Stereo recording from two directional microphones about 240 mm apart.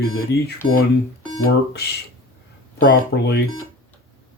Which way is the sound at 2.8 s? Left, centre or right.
Left.